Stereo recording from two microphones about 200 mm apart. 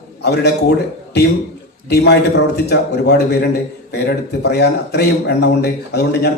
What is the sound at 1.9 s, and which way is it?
A man's voice, 60° left (ahead or behind).